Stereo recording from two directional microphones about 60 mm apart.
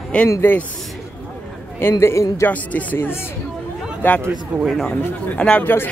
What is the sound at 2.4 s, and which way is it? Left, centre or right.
Speech, left.